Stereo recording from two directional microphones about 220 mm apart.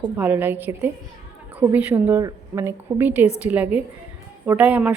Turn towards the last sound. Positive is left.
turn(degrees=-5)  # may be behind; listen again after turning